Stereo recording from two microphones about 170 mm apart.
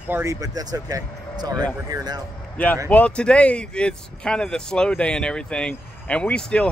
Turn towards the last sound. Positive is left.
turn(degrees=5)  # may be behind; listen again after turning